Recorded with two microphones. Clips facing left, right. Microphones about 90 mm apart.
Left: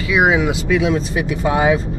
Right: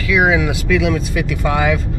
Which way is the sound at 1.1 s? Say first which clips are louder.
Left 1 dB; 65° right (ahead or behind).